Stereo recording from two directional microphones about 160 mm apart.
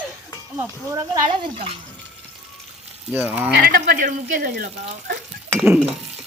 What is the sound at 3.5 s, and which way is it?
Speech, 75° right (ahead or behind).